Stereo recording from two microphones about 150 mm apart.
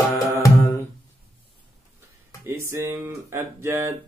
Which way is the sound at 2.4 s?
15° right (ahead or behind).